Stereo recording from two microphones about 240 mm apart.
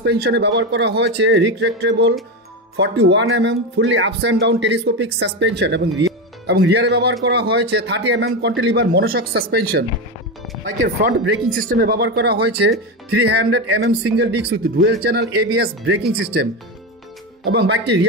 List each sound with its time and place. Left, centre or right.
0.0 s speech: right
11.0 s speech: right
17.5 s speech: right